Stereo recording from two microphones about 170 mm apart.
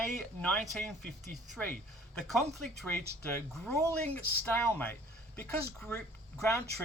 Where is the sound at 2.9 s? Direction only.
10° left (ahead or behind).